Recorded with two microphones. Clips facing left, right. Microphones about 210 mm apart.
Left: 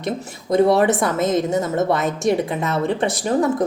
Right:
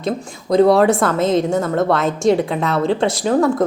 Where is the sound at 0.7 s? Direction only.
20° left (ahead or behind).